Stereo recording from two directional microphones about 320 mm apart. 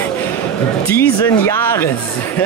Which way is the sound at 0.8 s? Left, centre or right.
Centre.